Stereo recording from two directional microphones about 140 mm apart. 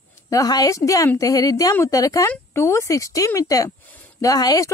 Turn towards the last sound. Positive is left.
turn(degrees=25)  # may be behind; listen again after turning